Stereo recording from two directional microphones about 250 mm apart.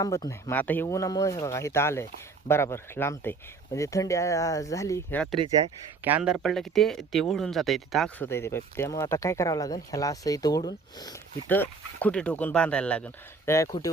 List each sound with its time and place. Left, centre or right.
0.0 s speech: centre